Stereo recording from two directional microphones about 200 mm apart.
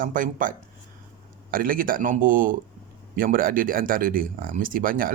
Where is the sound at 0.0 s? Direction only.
40° right (ahead or behind).